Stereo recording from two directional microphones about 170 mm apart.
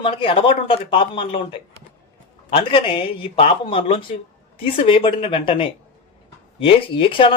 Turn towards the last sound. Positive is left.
turn(degrees=30)  # may be behind; listen again after turning